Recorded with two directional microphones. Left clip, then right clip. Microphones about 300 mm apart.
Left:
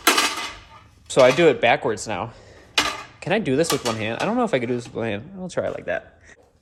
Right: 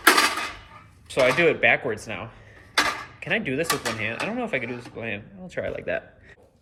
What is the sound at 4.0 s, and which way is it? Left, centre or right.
Speech, left.